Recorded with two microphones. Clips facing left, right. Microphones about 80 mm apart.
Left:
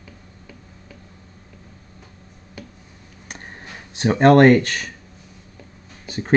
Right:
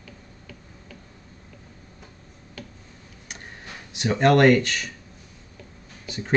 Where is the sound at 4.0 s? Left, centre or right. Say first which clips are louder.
Left 5 dB; left.